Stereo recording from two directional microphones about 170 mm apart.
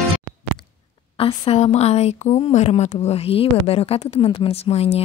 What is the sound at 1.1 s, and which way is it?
A woman's voice, 30° left (ahead or behind).